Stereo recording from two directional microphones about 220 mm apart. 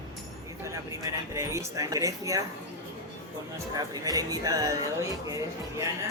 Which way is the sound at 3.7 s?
15° right (ahead or behind).